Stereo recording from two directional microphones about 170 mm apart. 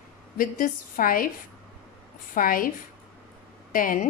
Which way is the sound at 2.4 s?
55° left (ahead or behind).